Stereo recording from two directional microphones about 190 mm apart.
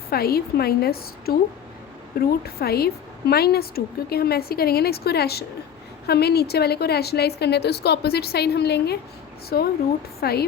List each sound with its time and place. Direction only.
0.1 s a woman's voice: 55° left (ahead or behind)